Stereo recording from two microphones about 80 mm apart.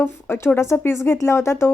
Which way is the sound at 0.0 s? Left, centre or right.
Left.